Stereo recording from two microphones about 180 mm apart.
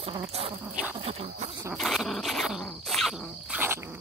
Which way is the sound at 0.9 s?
35° right (ahead or behind).